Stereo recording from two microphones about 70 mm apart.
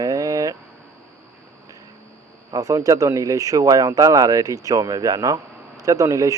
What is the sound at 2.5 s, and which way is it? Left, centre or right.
Speech, right.